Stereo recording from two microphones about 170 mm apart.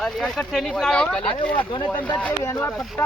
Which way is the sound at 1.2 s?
30° left (ahead or behind).